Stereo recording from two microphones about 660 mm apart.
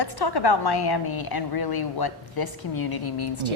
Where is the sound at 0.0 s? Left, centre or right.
Left.